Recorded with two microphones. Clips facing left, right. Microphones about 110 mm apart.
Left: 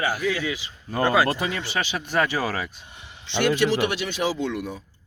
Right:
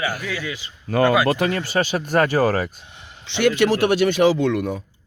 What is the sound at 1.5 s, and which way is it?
Speech, 45° right (ahead or behind).